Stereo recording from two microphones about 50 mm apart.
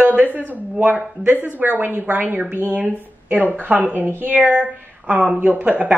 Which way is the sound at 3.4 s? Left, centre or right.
Right.